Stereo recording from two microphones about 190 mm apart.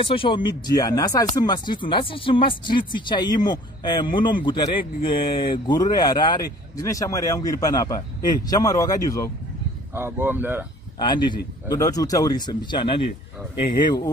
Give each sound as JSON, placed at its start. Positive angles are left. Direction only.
{"t": 0.0, "sound": "speech", "side_deg": 30}
{"t": 9.9, "sound": "speech", "side_deg": -10}
{"t": 11.0, "sound": "speech", "side_deg": 25}